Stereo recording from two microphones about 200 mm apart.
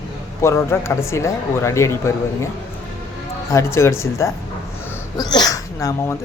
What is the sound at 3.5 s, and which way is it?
Speech, 15° left (ahead or behind).